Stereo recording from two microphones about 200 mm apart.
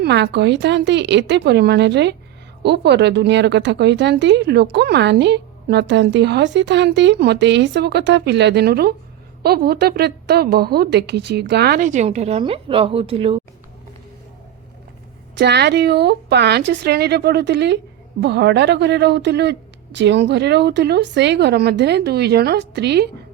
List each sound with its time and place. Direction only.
0.0 s a woman's voice: 60° right (ahead or behind); by 13.4 s 30° right (ahead or behind)
15.4 s a woman's voice: 55° right (ahead or behind)